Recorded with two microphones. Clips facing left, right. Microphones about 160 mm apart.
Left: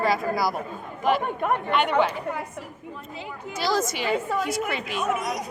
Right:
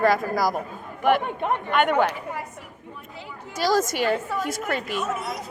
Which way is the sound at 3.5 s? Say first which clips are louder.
Right 3 dB; 45° right (ahead or behind).